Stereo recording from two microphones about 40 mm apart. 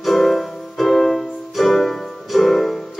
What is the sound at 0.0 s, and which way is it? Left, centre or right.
Music, centre.